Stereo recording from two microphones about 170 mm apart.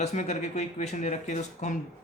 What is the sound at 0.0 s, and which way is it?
Speech, 40° left (ahead or behind).